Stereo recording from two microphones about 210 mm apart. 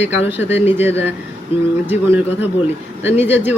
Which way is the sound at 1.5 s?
25° left (ahead or behind).